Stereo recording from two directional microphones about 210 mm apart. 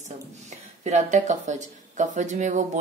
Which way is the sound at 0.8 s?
35° right (ahead or behind).